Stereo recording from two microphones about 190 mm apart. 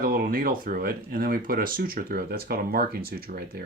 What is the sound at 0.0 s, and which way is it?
Speech, 50° right (ahead or behind).